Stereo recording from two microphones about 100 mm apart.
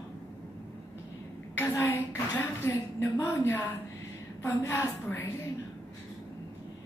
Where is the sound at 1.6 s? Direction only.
20° left (ahead or behind).